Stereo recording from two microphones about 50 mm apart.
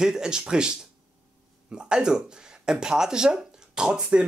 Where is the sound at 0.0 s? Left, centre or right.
Centre.